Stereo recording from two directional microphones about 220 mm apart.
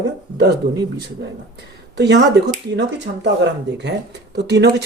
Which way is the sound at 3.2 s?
50° right (ahead or behind).